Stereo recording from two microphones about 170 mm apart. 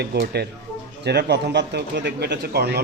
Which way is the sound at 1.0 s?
80° right.